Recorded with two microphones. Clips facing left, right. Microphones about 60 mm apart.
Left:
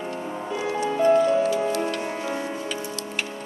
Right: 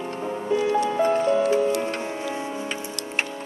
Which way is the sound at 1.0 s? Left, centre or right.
Right.